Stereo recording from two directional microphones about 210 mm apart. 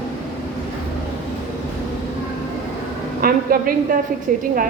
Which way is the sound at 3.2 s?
45° right (ahead or behind).